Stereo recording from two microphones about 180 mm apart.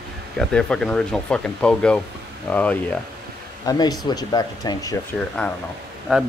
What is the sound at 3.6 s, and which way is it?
Speech, 20° left (ahead or behind).